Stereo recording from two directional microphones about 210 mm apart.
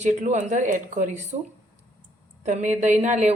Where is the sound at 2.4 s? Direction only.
35° right (ahead or behind).